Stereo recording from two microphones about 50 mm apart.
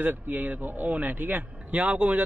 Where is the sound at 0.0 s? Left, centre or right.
Right.